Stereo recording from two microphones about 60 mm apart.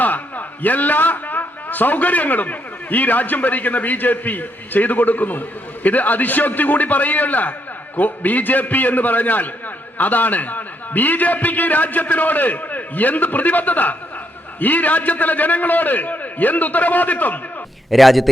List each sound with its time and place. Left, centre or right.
0.0 s a man's voice: left
17.9 s a man's voice: centre